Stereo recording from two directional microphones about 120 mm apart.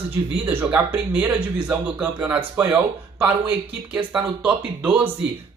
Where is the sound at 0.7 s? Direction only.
15° right (ahead or behind).